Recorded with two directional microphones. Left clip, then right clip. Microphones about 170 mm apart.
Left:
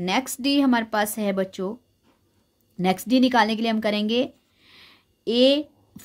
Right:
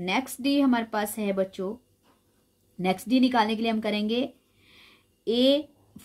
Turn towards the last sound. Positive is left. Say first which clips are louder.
# left 4 dB
turn(degrees=35)  # may be behind; listen again after turning